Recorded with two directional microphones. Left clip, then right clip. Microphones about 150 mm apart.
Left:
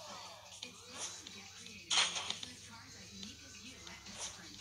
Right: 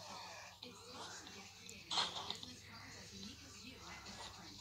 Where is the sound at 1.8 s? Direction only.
40° left (ahead or behind).